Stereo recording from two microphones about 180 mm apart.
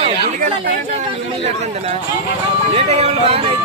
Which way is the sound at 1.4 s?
35° right (ahead or behind).